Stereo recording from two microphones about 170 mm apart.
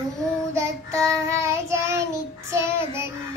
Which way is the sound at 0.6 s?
15° right (ahead or behind).